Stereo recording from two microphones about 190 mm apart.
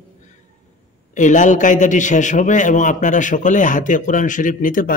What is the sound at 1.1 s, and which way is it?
A man's voice, 40° left (ahead or behind).